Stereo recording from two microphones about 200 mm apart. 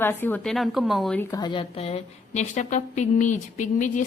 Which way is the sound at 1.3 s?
20° left (ahead or behind).